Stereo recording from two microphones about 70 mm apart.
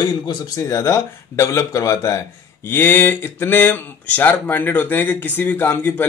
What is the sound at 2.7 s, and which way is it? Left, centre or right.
Speech, left.